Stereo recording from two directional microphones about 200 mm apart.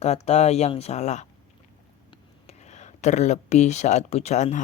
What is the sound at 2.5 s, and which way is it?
Speech, 35° left (ahead or behind).